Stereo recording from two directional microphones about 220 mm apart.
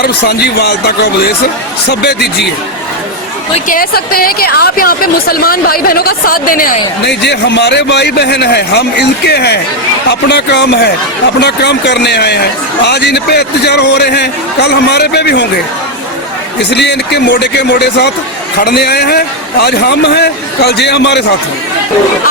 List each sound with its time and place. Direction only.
0.0 s a woman's voice: 45° left (ahead or behind)
3.7 s a woman's voice: 40° left (ahead or behind)
16.6 s a woman's voice: 50° left (ahead or behind)